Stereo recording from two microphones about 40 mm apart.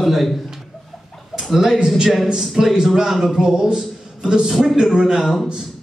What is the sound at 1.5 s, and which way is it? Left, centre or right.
Speech, centre.